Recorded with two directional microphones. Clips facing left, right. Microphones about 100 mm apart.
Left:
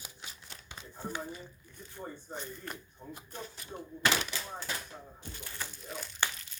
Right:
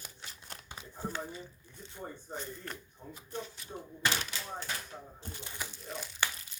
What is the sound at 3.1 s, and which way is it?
Speech, 50° left (ahead or behind).